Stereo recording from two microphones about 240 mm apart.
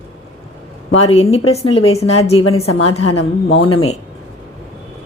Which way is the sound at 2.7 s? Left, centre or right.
Left.